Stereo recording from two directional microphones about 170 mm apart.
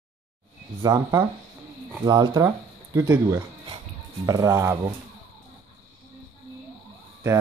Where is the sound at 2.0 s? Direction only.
25° right (ahead or behind).